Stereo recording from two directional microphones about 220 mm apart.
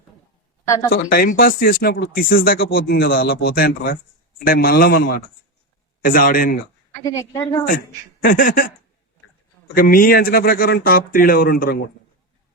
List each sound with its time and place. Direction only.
1.1 s speech: 45° left (ahead or behind)
7.0 s a woman's voice: 15° left (ahead or behind)
8.2 s speech: 40° left (ahead or behind)
9.7 s speech: 40° left (ahead or behind)